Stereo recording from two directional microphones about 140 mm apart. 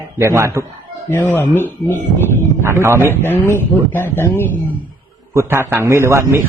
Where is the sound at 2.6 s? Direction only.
20° right (ahead or behind).